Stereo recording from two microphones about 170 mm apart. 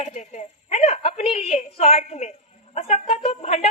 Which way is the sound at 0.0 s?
40° left (ahead or behind).